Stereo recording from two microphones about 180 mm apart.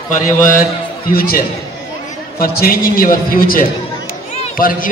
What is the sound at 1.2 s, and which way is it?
A man's voice, 55° left (ahead or behind).